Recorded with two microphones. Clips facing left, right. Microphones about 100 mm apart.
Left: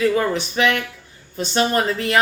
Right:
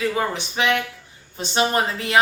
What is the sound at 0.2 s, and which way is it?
A woman's voice, 20° right (ahead or behind).